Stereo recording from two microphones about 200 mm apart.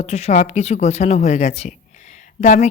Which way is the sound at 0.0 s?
30° left (ahead or behind).